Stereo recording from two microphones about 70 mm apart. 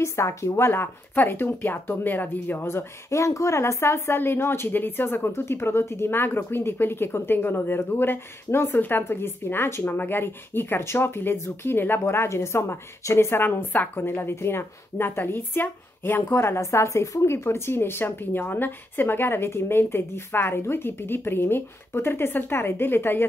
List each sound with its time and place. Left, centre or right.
0.0 s speech: left